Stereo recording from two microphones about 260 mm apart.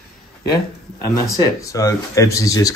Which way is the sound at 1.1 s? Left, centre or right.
Centre.